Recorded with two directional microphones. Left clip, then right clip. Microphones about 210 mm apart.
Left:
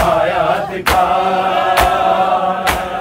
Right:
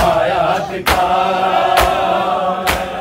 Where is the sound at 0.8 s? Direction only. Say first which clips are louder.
Left 1 dB; centre (ahead or behind).